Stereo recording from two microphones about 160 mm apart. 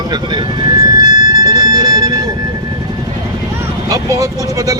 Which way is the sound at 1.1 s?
25° right (ahead or behind).